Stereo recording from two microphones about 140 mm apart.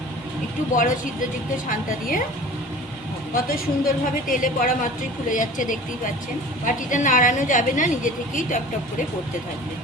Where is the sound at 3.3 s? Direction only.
90° left; by 8.6 s 70° left (ahead or behind).